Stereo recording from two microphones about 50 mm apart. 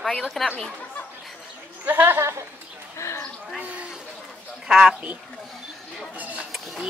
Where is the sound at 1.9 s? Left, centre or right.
Right.